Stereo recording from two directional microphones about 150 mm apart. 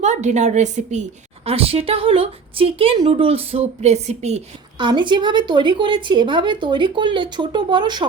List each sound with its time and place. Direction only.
0.0 s a woman's voice: 50° right (ahead or behind)
1.5 s a woman's voice: 40° right (ahead or behind)
4.8 s a woman's voice: 30° right (ahead or behind)